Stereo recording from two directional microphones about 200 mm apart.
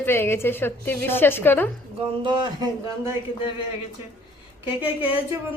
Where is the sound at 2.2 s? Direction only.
20° right (ahead or behind).